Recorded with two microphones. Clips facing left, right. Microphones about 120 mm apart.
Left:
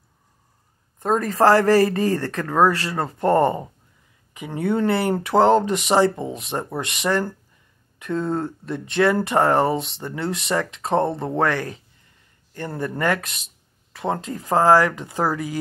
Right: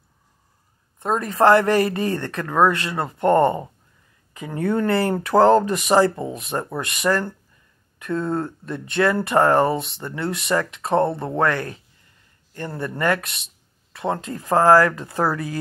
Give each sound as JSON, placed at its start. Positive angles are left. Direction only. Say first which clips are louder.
{"t": 1.0, "sound": "speech", "louder": "even", "side_deg": 40}
{"t": 4.3, "sound": "speech", "louder": "even", "side_deg": 20}
{"t": 8.1, "sound": "speech", "louder": "even", "side_deg": 35}